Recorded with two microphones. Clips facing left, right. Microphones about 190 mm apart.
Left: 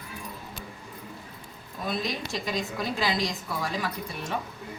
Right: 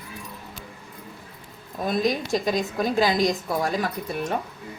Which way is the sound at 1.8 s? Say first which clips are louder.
Right 7 dB; 45° right (ahead or behind).